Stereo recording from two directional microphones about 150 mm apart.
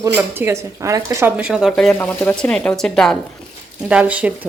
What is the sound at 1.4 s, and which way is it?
Speech, 5° right (ahead or behind).